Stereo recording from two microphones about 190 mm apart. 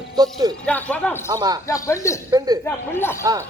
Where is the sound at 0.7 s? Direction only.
10° left (ahead or behind).